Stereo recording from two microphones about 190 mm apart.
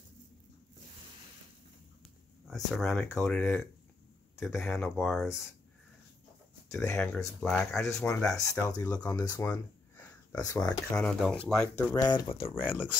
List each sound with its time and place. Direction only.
2.5 s speech: centre (ahead or behind)
6.7 s speech: 15° left (ahead or behind)
10.6 s speech: 5° left (ahead or behind)
11.9 s speech: 20° left (ahead or behind)
12.4 s speech: 5° right (ahead or behind)